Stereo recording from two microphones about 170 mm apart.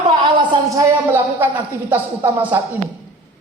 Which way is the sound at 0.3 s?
30° right (ahead or behind).